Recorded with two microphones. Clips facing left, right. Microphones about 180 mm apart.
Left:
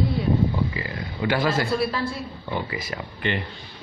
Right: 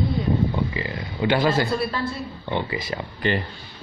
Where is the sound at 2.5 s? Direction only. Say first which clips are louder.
Right 3 dB; 25° right (ahead or behind).